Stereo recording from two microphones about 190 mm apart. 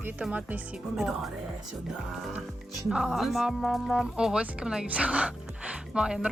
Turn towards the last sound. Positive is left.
turn(degrees=-5)  # may be behind; listen again after turning